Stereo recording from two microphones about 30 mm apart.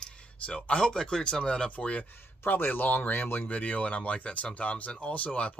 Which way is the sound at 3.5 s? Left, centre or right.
Left.